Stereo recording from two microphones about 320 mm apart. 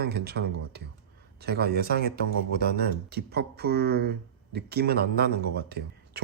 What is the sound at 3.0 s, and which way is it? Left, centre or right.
Speech, right.